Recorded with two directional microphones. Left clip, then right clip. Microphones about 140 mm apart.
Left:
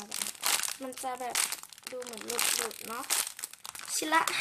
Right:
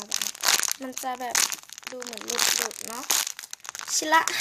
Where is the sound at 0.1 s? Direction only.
35° right (ahead or behind).